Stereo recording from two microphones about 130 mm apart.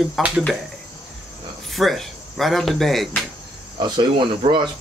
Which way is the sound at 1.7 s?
Centre (ahead or behind).